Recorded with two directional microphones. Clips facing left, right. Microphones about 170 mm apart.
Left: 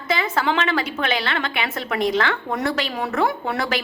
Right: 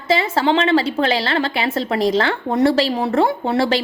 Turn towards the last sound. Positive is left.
turn(degrees=-30)  # may be behind; listen again after turning